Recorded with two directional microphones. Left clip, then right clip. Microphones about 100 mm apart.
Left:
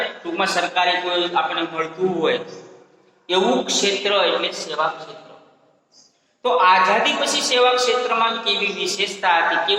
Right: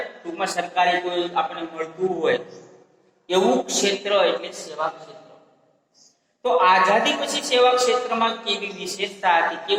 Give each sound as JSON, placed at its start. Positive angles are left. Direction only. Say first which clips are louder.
{"t": 0.0, "sound": "a woman's voice", "louder": "left 5 dB", "side_deg": 40}
{"t": 6.4, "sound": "a woman's voice", "louder": "left 2 dB", "side_deg": 40}